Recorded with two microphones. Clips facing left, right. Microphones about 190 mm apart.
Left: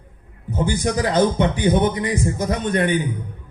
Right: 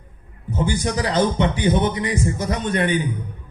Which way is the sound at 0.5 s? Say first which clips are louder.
Left 1 dB; 50° left (ahead or behind).